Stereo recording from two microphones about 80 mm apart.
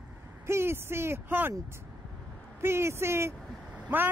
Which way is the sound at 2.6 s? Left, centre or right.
Right.